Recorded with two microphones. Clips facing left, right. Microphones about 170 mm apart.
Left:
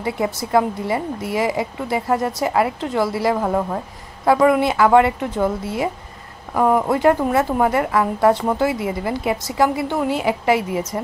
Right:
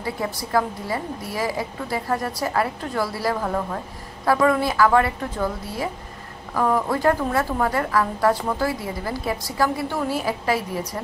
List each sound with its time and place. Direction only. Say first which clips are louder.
0.0 s a woman's voice: left 5 dB; 20° left (ahead or behind)